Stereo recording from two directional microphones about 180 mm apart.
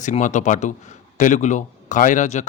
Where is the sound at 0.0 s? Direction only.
45° left (ahead or behind).